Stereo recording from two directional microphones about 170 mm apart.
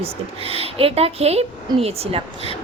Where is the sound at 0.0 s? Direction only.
35° right (ahead or behind).